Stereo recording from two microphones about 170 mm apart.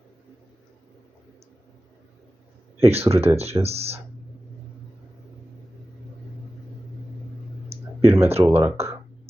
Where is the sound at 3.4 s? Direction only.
35° right (ahead or behind).